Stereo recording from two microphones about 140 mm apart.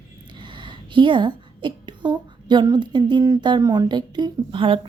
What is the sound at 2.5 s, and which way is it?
A woman's voice, 30° right (ahead or behind).